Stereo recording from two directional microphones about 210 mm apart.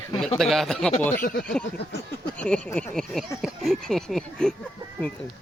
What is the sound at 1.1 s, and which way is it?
Speech, 40° left (ahead or behind).